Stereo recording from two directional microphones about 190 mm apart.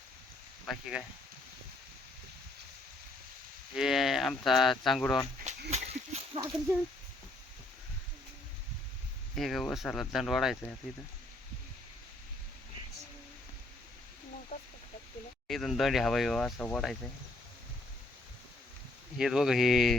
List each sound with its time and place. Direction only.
0.6 s speech: centre (ahead or behind)
3.8 s speech: centre (ahead or behind)
5.5 s a sound: 35° right (ahead or behind)
9.3 s speech: centre (ahead or behind)
15.4 s speech: centre (ahead or behind)
19.2 s speech: centre (ahead or behind)